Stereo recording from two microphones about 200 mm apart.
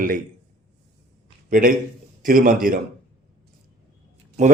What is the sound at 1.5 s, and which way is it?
A man's voice, 45° right (ahead or behind).